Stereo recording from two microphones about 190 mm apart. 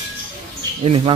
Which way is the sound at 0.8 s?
30° right (ahead or behind).